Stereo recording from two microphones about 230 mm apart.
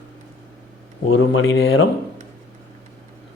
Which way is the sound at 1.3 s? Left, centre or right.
Left.